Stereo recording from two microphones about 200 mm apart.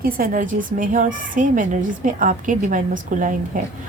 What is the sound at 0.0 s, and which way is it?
Speech, 45° right (ahead or behind).